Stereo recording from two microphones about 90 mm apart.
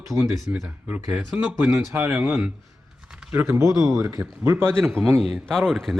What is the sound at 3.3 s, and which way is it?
Speech, 30° right (ahead or behind).